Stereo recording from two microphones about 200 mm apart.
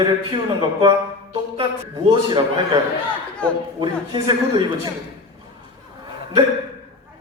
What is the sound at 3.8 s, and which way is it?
Speech, 20° right (ahead or behind).